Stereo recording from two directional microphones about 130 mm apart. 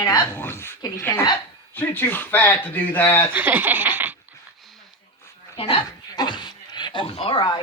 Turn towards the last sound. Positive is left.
turn(degrees=40)  # may be behind; listen again after turning